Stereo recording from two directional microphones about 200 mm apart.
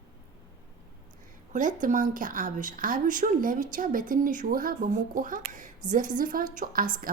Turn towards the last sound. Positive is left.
turn(degrees=-45)  # may be behind; listen again after turning